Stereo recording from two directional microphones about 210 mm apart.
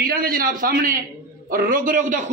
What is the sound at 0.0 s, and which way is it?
A man's voice, 45° right (ahead or behind).